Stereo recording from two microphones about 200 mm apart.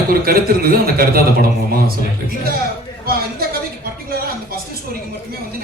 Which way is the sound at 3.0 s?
50° right (ahead or behind).